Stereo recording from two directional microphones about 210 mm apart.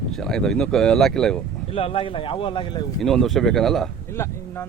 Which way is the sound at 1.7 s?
25° left (ahead or behind).